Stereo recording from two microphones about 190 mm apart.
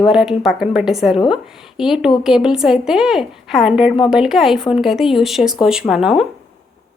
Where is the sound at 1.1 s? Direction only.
25° left (ahead or behind).